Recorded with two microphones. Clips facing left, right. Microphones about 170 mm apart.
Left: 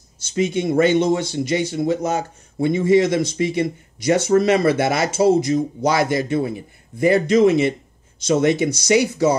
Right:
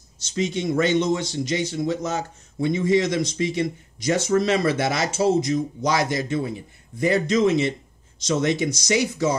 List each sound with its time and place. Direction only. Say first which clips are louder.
0.2 s speech: left 4 dB; 55° left (ahead or behind)